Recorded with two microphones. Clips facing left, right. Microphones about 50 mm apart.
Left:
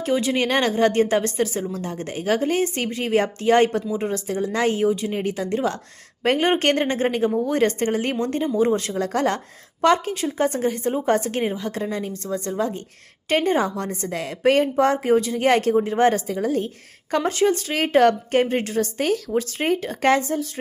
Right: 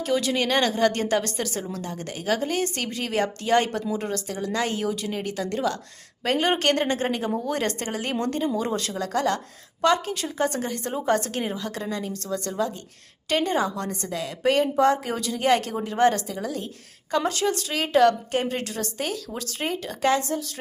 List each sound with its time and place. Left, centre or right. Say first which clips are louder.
0.0 s a woman's voice: left 3 dB; left
3.9 s a woman's voice: left 4 dB; left
4.5 s a woman's voice: left 6 dB; left